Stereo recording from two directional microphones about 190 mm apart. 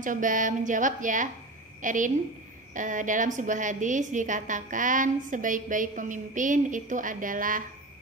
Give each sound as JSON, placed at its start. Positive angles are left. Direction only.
{"t": 0.0, "sound": "a woman's voice", "side_deg": -45}